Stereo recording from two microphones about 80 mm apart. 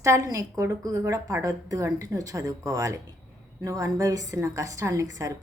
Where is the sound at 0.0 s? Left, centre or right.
Right.